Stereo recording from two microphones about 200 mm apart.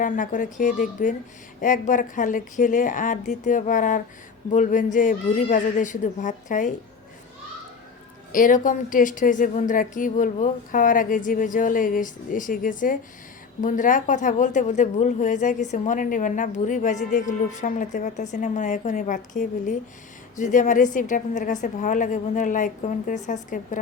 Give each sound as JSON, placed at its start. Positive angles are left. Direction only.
{"t": 0.0, "sound": "speech", "side_deg": 40}
{"t": 8.3, "sound": "speech", "side_deg": 40}